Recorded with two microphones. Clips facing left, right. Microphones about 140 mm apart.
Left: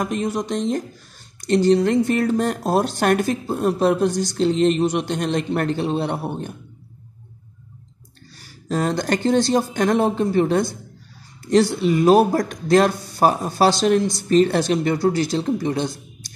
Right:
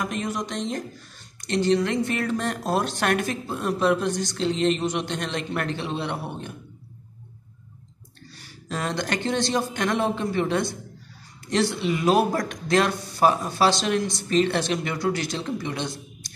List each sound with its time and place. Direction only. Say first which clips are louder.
0.0 s speech: left 5 dB; 35° left (ahead or behind)
8.6 s speech: left 7 dB; 40° left (ahead or behind)